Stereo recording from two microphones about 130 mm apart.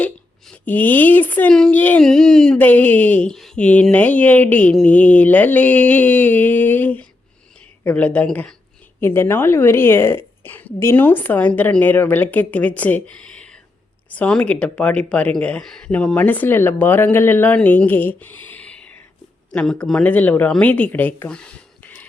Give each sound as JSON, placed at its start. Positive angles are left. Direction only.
{"t": 0.0, "sound": "a woman's voice", "side_deg": 10}